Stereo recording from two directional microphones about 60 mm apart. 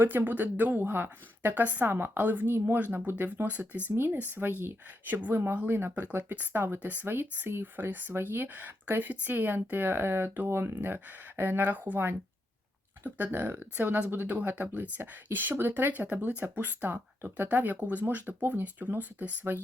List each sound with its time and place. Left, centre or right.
0.0 s speech: right
3.8 s speech: right
10.5 s speech: right
10.8 s speech: right